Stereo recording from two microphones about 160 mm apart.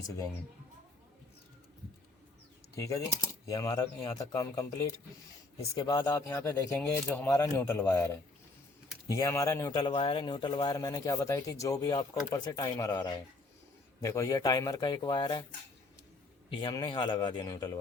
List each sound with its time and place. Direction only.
2.7 s a man's voice: 20° left (ahead or behind)
5.7 s a man's voice: 25° left (ahead or behind)
16.5 s a man's voice: 30° left (ahead or behind)